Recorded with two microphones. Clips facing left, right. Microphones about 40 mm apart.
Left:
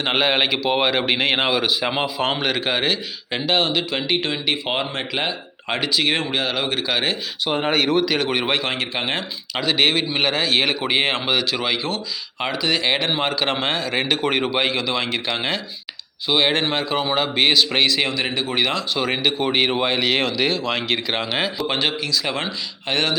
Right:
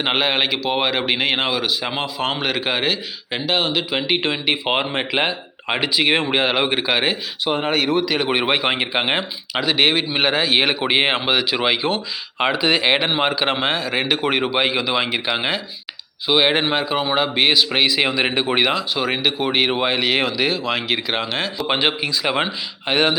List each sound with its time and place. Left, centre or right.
0.0 s a man's voice: centre; by 9.6 s right
9.6 s speech: centre
18.1 s speech: right
18.6 s speech: centre
21.3 s a man's voice: centre
21.7 s speech: centre